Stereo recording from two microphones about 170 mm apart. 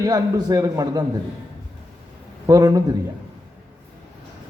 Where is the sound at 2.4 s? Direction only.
20° right (ahead or behind).